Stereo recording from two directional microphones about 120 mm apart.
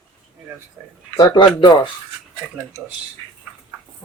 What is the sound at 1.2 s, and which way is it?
Speech, 35° left (ahead or behind).